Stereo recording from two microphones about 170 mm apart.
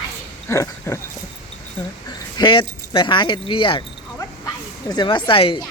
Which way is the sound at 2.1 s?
25° left (ahead or behind).